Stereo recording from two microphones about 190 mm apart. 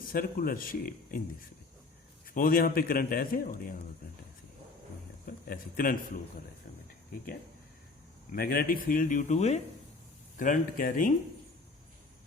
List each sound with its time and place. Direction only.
0.1 s a man's voice: 50° left (ahead or behind)
2.2 s a man's voice: 50° left (ahead or behind)
5.2 s a sound: 50° left (ahead or behind)
8.3 s a man's voice: 50° left (ahead or behind)